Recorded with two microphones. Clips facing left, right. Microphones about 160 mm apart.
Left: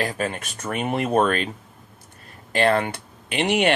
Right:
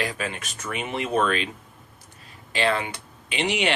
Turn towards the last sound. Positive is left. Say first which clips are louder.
# left 4 dB
turn(degrees=50)  # may be behind; listen again after turning